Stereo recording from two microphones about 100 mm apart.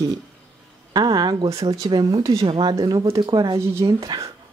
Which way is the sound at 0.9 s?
45° right (ahead or behind).